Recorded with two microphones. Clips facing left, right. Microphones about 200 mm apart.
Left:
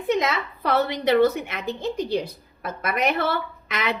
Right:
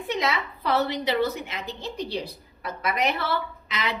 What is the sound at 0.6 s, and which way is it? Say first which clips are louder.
A woman's voice: left 3 dB; 55° left (ahead or behind).